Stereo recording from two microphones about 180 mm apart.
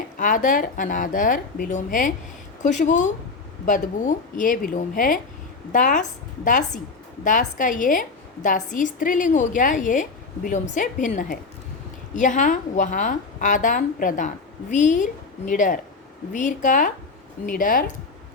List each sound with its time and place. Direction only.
0.2 s a woman's voice: 45° left (ahead or behind)